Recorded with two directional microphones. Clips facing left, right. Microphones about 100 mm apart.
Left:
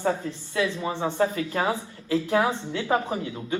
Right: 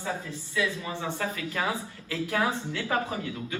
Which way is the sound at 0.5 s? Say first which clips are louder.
Left 4 dB; 35° left (ahead or behind).